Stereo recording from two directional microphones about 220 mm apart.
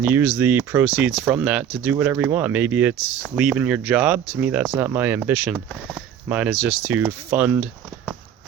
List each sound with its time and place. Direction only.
0.0 s speech: 10° right (ahead or behind)